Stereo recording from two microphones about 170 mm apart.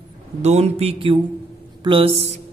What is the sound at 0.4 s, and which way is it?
Speech, 40° right (ahead or behind).